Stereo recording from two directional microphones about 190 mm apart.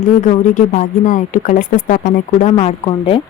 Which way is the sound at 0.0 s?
40° left (ahead or behind).